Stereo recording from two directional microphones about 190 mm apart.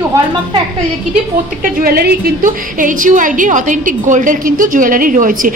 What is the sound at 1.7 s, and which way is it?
A woman's voice, 55° right (ahead or behind).